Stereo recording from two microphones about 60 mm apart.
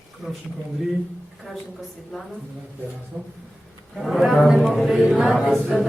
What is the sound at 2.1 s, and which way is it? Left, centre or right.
Mantra, centre.